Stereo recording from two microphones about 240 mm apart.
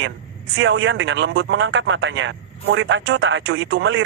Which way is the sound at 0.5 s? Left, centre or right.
Right.